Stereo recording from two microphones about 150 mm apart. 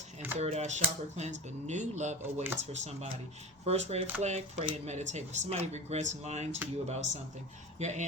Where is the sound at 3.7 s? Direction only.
45° right (ahead or behind).